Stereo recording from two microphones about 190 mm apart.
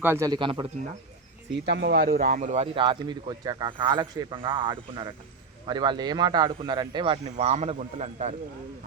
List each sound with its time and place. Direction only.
0.0 s speech: 15° right (ahead or behind)
1.6 s speech: 65° right (ahead or behind); by 8.4 s 35° right (ahead or behind)